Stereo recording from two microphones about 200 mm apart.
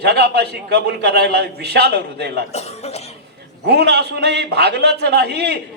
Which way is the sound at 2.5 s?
30° left (ahead or behind).